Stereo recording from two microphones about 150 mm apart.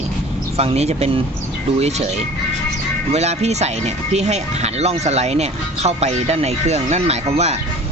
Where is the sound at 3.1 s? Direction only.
45° right (ahead or behind).